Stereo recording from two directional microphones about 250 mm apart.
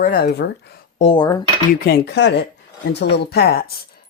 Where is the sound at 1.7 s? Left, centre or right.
Left.